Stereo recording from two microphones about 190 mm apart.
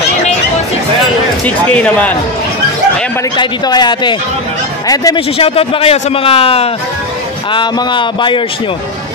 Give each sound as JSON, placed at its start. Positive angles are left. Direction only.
{"t": 1.4, "sound": "speech", "side_deg": 5}
{"t": 3.3, "sound": "a man's voice", "side_deg": 20}